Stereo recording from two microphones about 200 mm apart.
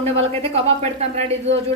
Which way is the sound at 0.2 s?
30° right (ahead or behind).